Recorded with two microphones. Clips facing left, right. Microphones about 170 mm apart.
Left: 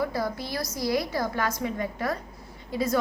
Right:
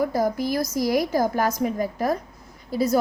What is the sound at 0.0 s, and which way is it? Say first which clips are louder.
A woman's voice: right 6 dB; 45° right (ahead or behind).